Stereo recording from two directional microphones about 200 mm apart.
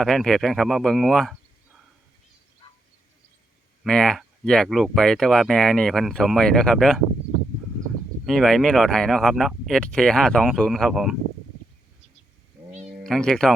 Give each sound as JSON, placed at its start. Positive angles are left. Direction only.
{"t": 0.0, "sound": "speech", "side_deg": 0}
{"t": 3.8, "sound": "speech", "side_deg": 5}
{"t": 8.3, "sound": "speech", "side_deg": 0}
{"t": 12.7, "sound": "a sound", "side_deg": -35}
{"t": 13.1, "sound": "speech", "side_deg": 5}